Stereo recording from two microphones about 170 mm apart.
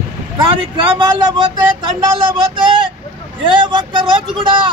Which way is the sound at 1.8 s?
25° right (ahead or behind).